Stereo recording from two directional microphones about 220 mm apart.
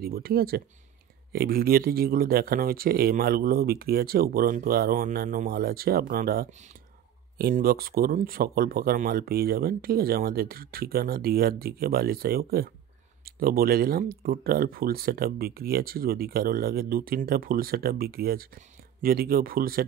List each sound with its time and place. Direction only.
0.0 s speech: 45° right (ahead or behind)